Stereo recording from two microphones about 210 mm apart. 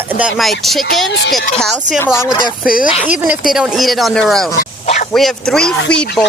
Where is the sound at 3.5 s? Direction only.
Centre (ahead or behind).